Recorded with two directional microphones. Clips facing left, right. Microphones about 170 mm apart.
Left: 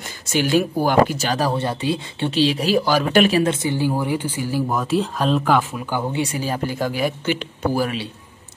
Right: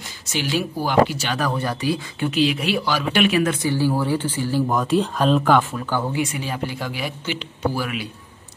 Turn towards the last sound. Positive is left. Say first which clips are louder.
# left 3 dB
turn(degrees=50)  # may be behind; listen again after turning